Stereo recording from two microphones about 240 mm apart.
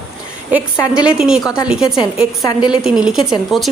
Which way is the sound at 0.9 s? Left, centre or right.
Centre.